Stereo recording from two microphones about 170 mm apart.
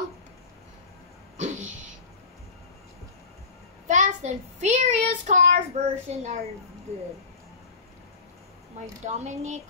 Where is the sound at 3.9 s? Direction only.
45° right (ahead or behind).